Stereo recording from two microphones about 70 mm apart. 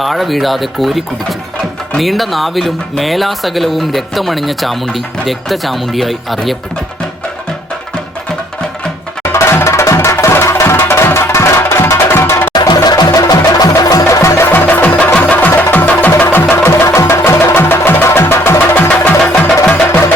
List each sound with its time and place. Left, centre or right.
0.0 s speech: centre
9.3 s music: left
12.5 s music: left
13.1 s music: left
14.0 s music: left
16.6 s music: left
18.9 s music: left